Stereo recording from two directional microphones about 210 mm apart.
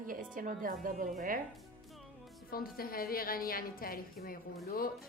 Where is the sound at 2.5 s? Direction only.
45° left (ahead or behind).